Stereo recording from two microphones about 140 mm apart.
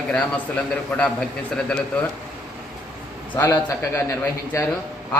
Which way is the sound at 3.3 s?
15° left (ahead or behind).